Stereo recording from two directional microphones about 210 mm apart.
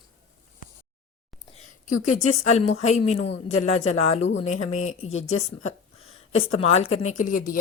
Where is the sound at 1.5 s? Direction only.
35° left (ahead or behind).